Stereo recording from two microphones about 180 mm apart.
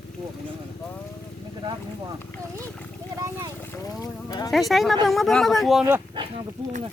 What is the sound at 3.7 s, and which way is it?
Boat, 20° left (ahead or behind).